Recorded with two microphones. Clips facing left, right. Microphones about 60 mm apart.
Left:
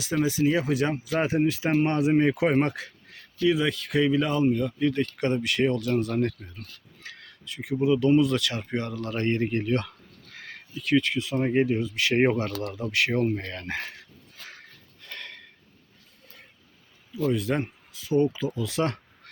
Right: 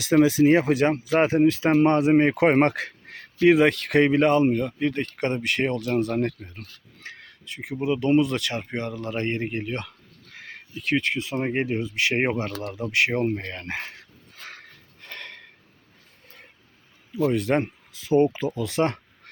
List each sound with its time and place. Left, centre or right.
0.0 s speech: right
1.5 s speech: right
1.7 s speech: right
2.0 s speech: right
8.6 s speech: right
10.3 s a sound: centre
10.8 s speech: right
11.8 s speech: right
15.0 s a sound: right
17.3 s speech: right
17.6 s a sound: right
18.3 s speech: right
18.6 s speech: right